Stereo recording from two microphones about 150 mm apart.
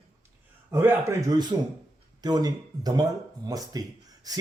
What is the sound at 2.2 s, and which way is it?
Speech, 25° right (ahead or behind).